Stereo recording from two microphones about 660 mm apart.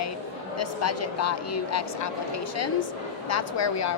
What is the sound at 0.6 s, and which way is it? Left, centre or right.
A woman's voice, left.